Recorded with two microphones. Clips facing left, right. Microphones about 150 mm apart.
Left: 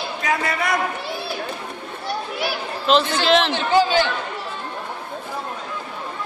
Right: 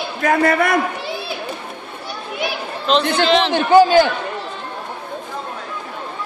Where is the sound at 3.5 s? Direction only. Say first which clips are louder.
Right 7 dB; 50° right (ahead or behind).